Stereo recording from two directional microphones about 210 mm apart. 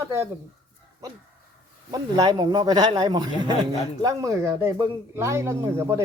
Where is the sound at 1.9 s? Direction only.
20° right (ahead or behind).